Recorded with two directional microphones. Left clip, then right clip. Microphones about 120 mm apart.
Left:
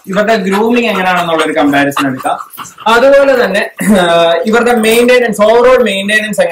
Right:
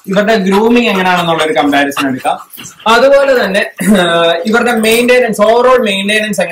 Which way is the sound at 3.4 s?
Centre (ahead or behind).